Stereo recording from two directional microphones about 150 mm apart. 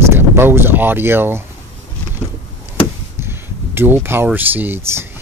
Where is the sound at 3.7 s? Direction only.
15° right (ahead or behind).